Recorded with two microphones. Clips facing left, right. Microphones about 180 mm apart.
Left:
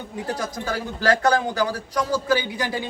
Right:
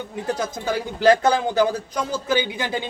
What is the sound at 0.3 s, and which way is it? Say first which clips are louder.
A man's voice: right 3 dB; 20° right (ahead or behind).